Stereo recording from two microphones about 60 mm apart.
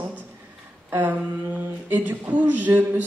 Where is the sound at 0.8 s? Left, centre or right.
Right.